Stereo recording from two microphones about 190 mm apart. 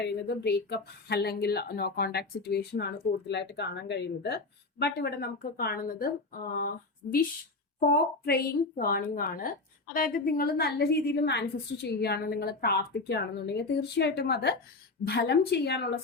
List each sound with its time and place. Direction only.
0.0 s a woman's voice: 60° left (ahead or behind)